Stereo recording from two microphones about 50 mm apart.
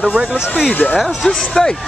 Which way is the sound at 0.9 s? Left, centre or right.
Centre.